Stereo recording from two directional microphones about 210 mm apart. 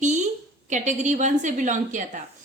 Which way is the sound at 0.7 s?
35° right (ahead or behind).